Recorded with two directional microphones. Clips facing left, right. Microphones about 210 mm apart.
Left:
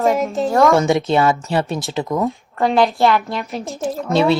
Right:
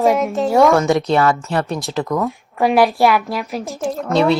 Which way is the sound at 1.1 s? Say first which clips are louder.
Even; 20° left (ahead or behind).